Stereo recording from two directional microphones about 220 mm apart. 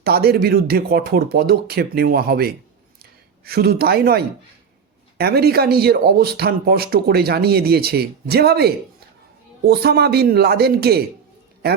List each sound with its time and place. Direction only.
0.0 s speech: 45° right (ahead or behind)